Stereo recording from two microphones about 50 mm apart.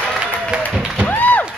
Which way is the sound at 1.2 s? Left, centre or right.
Left.